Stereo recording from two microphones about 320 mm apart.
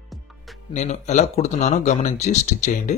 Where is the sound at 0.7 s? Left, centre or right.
Left.